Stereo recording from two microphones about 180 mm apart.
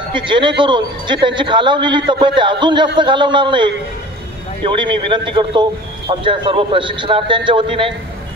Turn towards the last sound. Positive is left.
turn(degrees=-30)  # may be behind; listen again after turning